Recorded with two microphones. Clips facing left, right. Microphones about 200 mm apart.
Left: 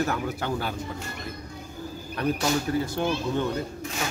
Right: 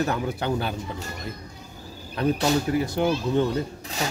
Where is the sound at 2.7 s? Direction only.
15° right (ahead or behind).